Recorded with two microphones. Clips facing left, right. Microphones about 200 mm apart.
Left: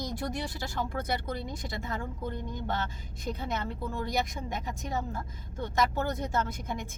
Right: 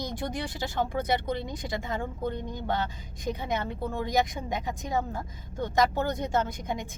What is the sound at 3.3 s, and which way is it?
Speech, 15° right (ahead or behind).